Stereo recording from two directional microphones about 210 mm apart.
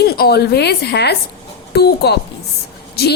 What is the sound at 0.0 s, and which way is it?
A woman's voice, 50° left (ahead or behind).